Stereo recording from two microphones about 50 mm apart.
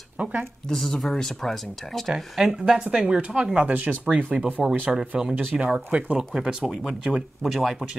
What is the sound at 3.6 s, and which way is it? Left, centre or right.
Speech, right.